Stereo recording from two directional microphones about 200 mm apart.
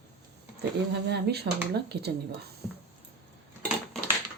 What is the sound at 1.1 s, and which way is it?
Speech, 55° right (ahead or behind).